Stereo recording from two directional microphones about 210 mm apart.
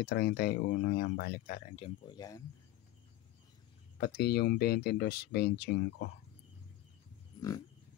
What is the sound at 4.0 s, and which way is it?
Speech, 45° left (ahead or behind).